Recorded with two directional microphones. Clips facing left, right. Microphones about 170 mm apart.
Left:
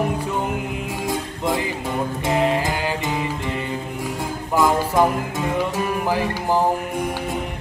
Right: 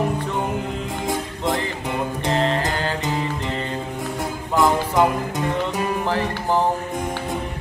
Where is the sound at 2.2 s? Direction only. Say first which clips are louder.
Left 2 dB; 10° left (ahead or behind).